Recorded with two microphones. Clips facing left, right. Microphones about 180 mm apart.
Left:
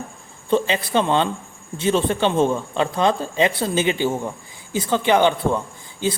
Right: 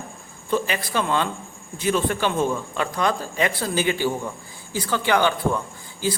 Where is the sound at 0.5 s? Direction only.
25° left (ahead or behind).